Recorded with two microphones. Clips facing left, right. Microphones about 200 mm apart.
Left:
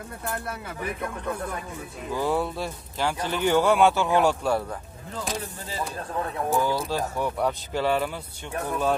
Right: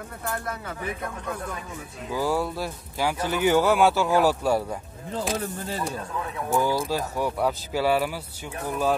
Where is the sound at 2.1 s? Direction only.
Centre (ahead or behind).